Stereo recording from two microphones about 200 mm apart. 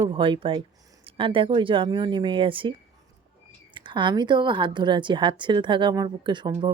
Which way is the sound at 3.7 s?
25° right (ahead or behind).